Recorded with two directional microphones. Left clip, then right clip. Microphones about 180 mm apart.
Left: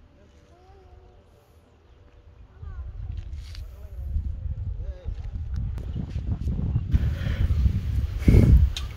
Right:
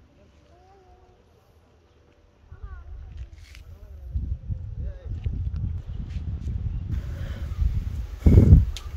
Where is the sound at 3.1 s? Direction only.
5° left (ahead or behind).